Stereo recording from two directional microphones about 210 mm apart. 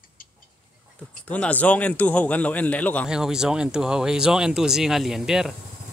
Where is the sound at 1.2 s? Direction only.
5° left (ahead or behind).